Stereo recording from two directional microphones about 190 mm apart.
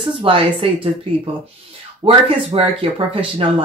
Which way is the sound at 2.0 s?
30° right (ahead or behind).